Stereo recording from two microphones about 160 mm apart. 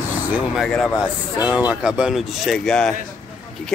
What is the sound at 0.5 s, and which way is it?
A man's voice, centre (ahead or behind).